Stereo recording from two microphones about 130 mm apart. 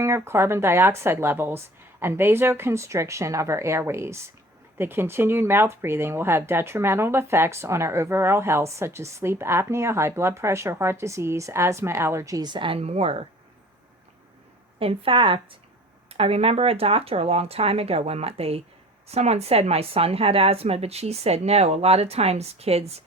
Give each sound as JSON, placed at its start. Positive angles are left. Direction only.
{"t": 0.0, "sound": "speech", "side_deg": -20}
{"t": 14.8, "sound": "speech", "side_deg": -45}